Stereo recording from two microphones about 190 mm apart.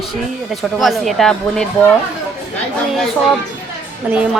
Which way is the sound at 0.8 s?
Centre (ahead or behind).